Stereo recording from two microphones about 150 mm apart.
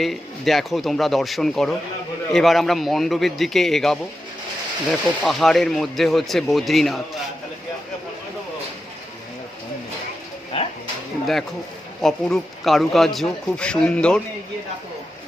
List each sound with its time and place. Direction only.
0.0 s speech: centre (ahead or behind)
10.5 s a sound: 40° left (ahead or behind)
12.0 s speech: centre (ahead or behind)